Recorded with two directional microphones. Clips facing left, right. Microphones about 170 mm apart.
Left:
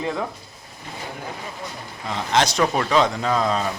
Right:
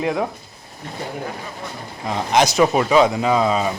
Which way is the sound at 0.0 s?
15° right (ahead or behind).